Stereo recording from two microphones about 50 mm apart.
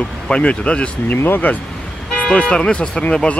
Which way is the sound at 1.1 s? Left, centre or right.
Left.